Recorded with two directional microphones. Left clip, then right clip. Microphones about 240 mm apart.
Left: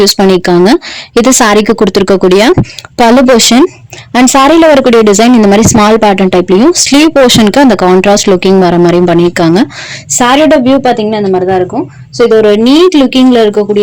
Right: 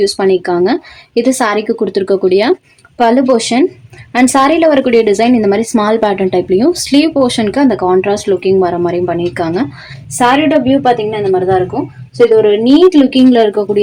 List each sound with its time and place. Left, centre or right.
0.0 s a woman's voice: left